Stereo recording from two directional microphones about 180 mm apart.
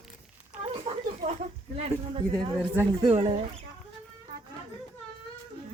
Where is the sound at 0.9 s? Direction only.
35° right (ahead or behind).